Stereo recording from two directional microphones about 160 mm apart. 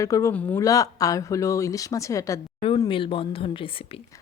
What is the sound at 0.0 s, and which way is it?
Speech, 20° left (ahead or behind).